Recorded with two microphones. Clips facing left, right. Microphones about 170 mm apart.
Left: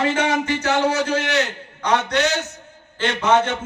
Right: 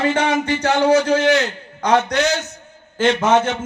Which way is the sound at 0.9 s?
35° right (ahead or behind).